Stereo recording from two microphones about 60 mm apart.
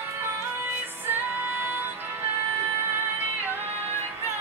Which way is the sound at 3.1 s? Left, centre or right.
Right.